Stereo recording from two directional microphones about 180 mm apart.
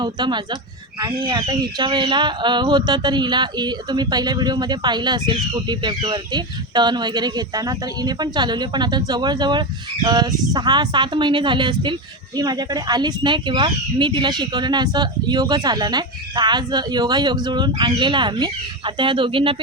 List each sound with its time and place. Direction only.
0.0 s speech: 25° right (ahead or behind)